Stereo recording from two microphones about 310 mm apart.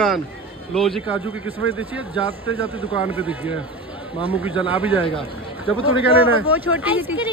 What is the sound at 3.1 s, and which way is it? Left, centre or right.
A man's voice, centre.